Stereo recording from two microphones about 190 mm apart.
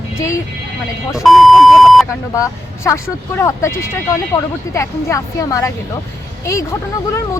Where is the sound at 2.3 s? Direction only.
15° left (ahead or behind).